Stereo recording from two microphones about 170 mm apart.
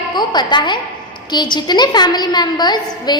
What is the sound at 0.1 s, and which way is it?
A woman's voice, 25° left (ahead or behind).